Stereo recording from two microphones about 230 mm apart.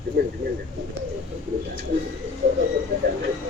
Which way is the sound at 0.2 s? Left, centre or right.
Right.